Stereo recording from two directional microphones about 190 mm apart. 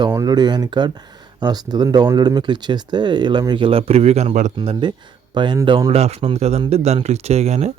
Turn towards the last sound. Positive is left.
turn(degrees=-35)  # may be behind; listen again after turning